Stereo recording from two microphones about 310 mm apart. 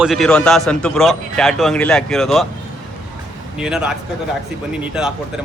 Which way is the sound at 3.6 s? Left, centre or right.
Centre.